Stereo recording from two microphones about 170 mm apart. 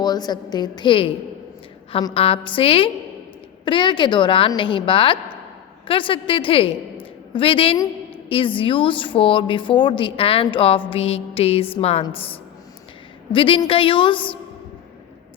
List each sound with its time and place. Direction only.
0.0 s a woman's voice: 25° left (ahead or behind)